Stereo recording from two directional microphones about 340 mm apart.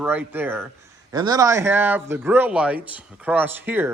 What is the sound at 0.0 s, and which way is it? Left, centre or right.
A man's voice, centre.